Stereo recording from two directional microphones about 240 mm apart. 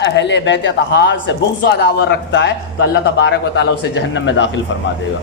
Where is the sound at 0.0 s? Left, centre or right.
Left.